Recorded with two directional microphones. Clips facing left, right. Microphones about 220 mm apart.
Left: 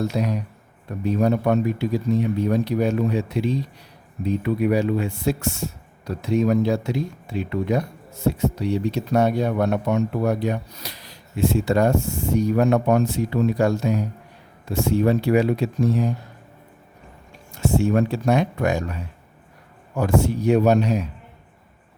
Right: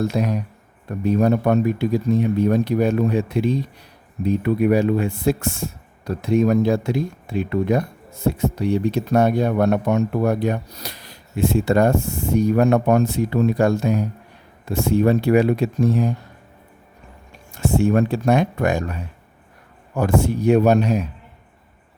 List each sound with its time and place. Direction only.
0.0 s speech: 50° right (ahead or behind)
17.5 s speech: 55° right (ahead or behind)
20.0 s speech: 55° right (ahead or behind)